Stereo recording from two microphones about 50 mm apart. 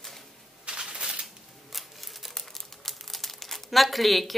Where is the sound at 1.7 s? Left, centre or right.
Centre.